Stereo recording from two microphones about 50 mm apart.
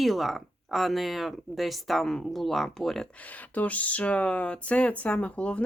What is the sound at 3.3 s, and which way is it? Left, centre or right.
Speech, left.